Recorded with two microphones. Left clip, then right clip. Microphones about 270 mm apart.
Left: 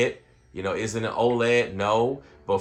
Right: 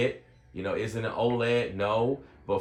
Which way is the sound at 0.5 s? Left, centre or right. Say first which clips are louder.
Left 3 dB; left.